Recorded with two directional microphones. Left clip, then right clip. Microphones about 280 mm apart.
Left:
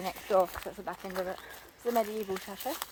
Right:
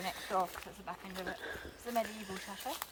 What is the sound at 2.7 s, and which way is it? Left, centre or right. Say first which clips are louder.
Speech: left 5 dB; left.